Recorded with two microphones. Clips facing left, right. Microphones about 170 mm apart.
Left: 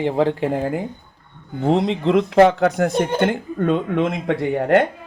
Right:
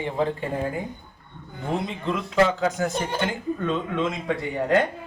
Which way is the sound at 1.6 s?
90° left.